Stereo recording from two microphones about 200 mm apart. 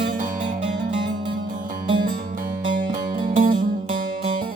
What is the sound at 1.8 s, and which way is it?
Music, 25° right (ahead or behind).